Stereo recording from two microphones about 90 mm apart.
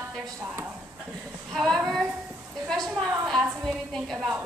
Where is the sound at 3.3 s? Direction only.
Centre (ahead or behind).